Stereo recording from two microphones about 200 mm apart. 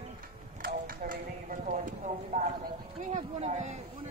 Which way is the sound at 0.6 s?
50° right (ahead or behind).